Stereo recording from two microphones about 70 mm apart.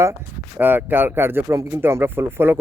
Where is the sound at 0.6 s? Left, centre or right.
Right.